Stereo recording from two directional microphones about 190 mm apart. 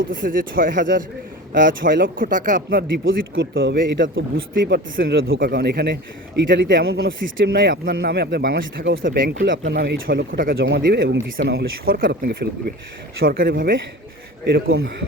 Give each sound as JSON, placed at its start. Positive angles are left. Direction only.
{"t": 0.2, "sound": "speech", "side_deg": -45}
{"t": 3.0, "sound": "speech", "side_deg": -90}
{"t": 3.8, "sound": "a man's voice", "side_deg": -75}
{"t": 8.8, "sound": "speech", "side_deg": -90}
{"t": 9.4, "sound": "speech", "side_deg": -65}
{"t": 14.4, "sound": "speech", "side_deg": -75}